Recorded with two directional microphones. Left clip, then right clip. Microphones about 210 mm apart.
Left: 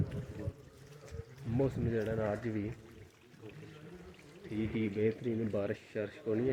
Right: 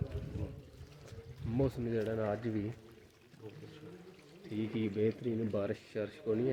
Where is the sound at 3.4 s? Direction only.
45° right (ahead or behind).